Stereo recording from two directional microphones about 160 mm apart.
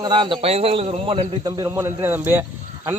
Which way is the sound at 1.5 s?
20° right (ahead or behind).